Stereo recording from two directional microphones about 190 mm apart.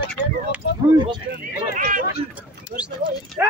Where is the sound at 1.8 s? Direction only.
45° right (ahead or behind).